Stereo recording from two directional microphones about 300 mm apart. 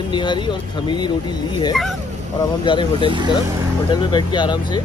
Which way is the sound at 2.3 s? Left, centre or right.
Centre.